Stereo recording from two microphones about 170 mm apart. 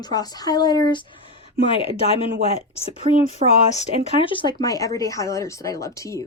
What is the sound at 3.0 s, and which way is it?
Speech, 35° right (ahead or behind).